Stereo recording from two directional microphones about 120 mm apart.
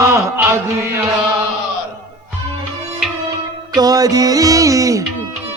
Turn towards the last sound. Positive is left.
turn(degrees=-30)  # may be behind; listen again after turning